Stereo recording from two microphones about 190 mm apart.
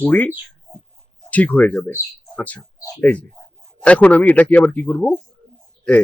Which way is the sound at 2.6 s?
20° left (ahead or behind).